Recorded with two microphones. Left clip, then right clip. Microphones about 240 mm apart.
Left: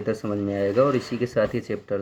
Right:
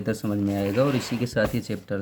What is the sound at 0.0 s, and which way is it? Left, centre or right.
Speech, right.